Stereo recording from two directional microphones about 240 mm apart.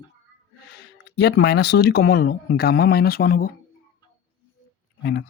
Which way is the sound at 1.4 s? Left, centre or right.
Left.